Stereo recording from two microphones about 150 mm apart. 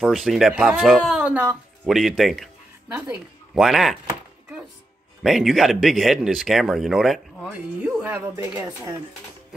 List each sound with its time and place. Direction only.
0.0 s speech: centre (ahead or behind)
3.5 s speech: centre (ahead or behind)
5.2 s speech: centre (ahead or behind)
8.4 s speech: 20° right (ahead or behind)